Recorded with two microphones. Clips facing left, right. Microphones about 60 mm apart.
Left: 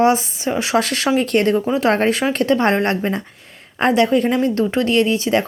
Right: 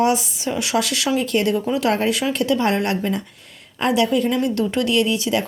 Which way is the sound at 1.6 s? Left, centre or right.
Left.